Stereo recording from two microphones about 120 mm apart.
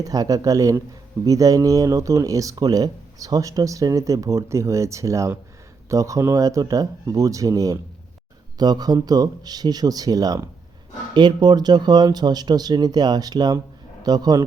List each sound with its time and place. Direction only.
0.0 s speech: 30° right (ahead or behind)